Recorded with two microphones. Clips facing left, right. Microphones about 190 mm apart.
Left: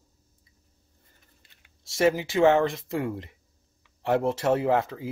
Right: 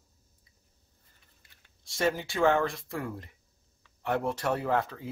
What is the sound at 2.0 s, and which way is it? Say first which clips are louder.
Speech: left 6 dB; 20° left (ahead or behind).